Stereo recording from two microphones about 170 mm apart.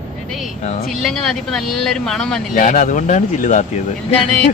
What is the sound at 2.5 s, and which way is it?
Speech, 50° left (ahead or behind).